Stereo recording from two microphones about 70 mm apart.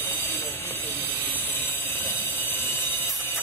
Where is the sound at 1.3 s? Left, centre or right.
Left.